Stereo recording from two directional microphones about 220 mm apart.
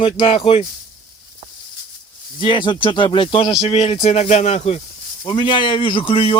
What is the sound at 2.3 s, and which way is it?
Speech, 20° left (ahead or behind).